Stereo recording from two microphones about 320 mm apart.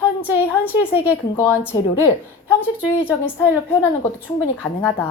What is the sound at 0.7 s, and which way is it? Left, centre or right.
Speech, centre.